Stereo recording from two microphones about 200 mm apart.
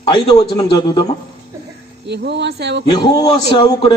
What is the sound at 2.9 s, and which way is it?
Speech, 20° left (ahead or behind).